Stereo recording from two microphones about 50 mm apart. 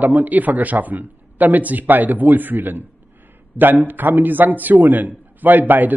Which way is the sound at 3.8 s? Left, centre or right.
Right.